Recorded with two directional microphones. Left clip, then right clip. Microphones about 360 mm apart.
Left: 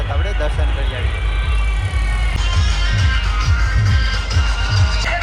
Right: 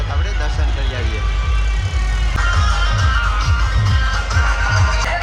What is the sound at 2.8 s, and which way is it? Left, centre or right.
Music, centre.